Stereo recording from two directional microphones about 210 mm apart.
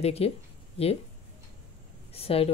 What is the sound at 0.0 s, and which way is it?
Speech, 30° left (ahead or behind).